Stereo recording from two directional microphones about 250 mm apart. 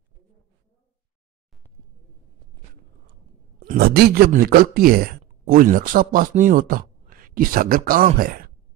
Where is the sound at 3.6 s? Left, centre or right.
Right.